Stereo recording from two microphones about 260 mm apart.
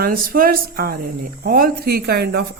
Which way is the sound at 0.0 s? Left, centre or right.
Right.